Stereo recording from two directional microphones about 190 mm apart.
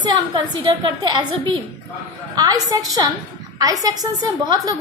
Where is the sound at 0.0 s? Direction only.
25° right (ahead or behind).